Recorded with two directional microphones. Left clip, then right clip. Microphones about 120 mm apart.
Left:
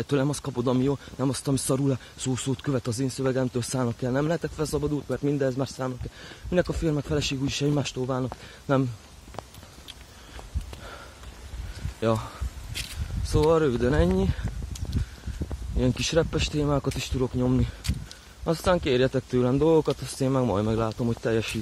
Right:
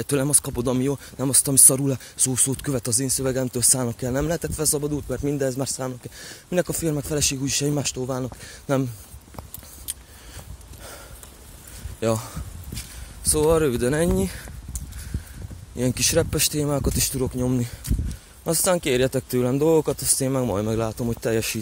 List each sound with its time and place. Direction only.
0.0 s speech: 20° right (ahead or behind)
12.0 s speech: 15° right (ahead or behind)
15.8 s speech: 15° right (ahead or behind)